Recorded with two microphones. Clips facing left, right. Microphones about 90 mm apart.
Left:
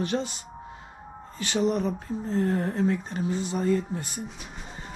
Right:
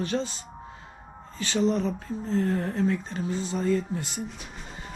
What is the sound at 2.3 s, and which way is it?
Speech, 40° left (ahead or behind).